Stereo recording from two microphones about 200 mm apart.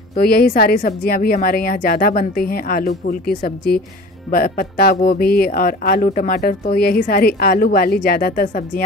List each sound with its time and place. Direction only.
0.2 s speech: 50° left (ahead or behind)